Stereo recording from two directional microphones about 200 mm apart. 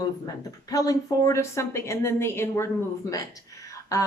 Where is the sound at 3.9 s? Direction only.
15° left (ahead or behind).